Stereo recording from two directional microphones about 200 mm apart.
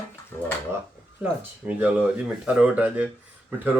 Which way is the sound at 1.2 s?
10° right (ahead or behind).